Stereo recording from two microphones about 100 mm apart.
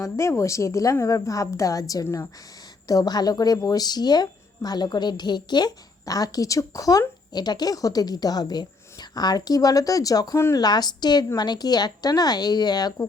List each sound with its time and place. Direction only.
0.0 s speech: 30° left (ahead or behind)
2.8 s speech: 40° left (ahead or behind)
10.3 s speech: 25° left (ahead or behind)
10.6 s a woman's voice: 45° left (ahead or behind)